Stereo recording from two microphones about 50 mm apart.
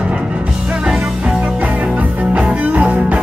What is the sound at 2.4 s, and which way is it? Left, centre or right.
Music, right.